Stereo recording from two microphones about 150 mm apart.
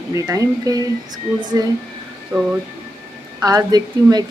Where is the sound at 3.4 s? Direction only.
25° right (ahead or behind).